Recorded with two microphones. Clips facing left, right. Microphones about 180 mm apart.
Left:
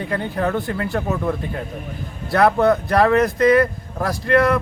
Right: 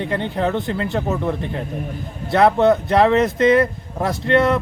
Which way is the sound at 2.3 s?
25° right (ahead or behind).